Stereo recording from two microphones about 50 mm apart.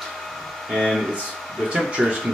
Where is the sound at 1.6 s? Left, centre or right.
Centre.